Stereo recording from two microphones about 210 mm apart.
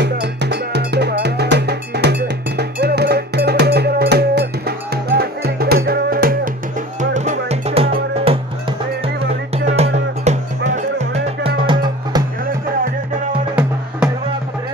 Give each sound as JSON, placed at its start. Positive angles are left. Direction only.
{"t": 0.0, "sound": "music", "side_deg": -55}
{"t": 1.2, "sound": "cowbell", "side_deg": -50}
{"t": 2.5, "sound": "music", "side_deg": -50}
{"t": 7.0, "sound": "music", "side_deg": -35}
{"t": 9.7, "sound": "music", "side_deg": -30}
{"t": 13.6, "sound": "music", "side_deg": -5}